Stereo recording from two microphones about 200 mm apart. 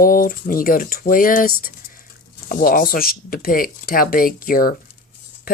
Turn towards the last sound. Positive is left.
turn(degrees=45)  # may be behind; listen again after turning